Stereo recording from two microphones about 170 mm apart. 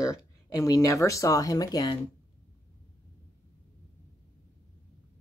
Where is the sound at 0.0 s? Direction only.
20° left (ahead or behind).